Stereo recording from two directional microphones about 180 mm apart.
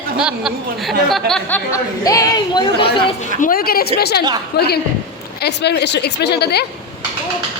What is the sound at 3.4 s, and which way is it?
Speech, 55° left (ahead or behind).